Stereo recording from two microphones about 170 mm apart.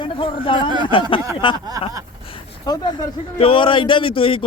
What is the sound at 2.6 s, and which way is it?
A man's voice, 25° left (ahead or behind).